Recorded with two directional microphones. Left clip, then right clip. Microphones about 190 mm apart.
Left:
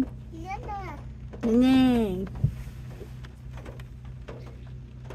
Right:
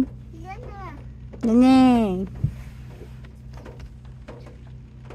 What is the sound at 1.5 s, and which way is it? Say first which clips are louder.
Speech: right 6 dB; 40° right (ahead or behind).